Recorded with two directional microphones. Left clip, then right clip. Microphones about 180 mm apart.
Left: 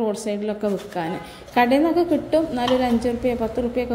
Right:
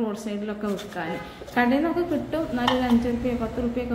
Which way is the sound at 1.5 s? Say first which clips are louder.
Left 5 dB; 30° left (ahead or behind).